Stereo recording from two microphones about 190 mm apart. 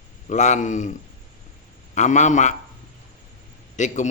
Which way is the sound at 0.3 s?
40° left (ahead or behind).